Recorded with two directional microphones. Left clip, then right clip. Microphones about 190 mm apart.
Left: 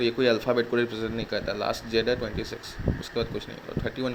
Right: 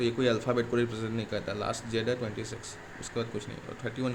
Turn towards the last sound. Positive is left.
turn(degrees=15)  # may be behind; listen again after turning